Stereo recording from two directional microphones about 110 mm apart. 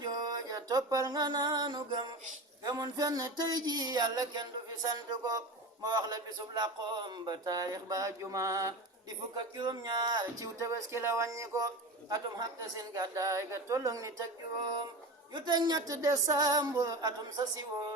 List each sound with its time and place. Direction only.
0.0 s music: 35° right (ahead or behind)
2.6 s speech: 35° right (ahead or behind)
9.3 s speech: 40° right (ahead or behind)